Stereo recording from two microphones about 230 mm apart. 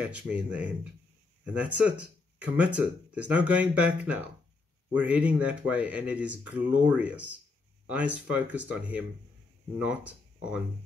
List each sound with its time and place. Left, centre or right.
0.0 s speech: centre